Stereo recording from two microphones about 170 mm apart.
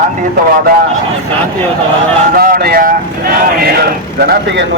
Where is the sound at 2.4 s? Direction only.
60° right (ahead or behind).